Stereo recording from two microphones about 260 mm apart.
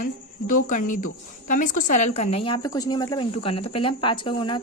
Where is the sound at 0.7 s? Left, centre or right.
Left.